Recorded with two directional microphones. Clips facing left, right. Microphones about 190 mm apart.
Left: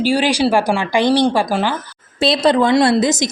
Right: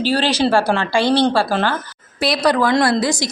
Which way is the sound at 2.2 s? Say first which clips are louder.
Left 3 dB; 25° left (ahead or behind).